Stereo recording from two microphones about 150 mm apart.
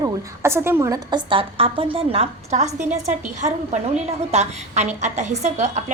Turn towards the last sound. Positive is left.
turn(degrees=-50)  # may be behind; listen again after turning